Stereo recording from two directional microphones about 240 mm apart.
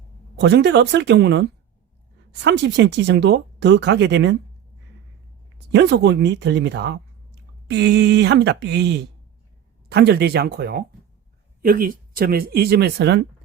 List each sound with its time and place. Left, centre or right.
0.3 s speech: right
5.7 s speech: right